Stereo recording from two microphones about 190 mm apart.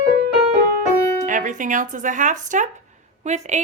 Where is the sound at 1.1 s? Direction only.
40° right (ahead or behind).